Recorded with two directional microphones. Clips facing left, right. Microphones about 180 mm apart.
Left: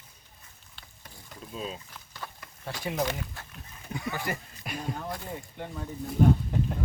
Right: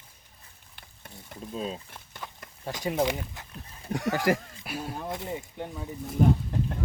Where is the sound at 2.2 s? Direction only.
15° right (ahead or behind).